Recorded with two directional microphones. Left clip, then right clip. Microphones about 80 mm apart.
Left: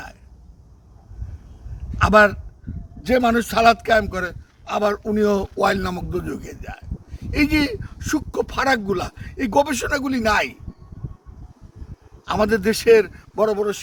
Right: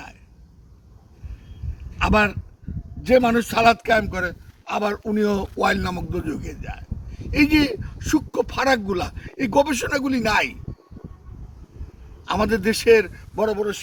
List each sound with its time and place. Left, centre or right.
2.0 s a man's voice: left
12.2 s speech: left